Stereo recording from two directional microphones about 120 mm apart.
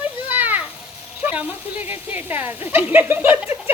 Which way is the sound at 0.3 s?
15° right (ahead or behind).